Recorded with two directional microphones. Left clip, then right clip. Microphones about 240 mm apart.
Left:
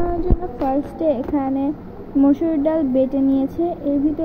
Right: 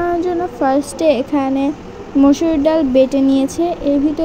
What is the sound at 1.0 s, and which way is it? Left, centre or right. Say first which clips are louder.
A woman's voice: right 5 dB; right.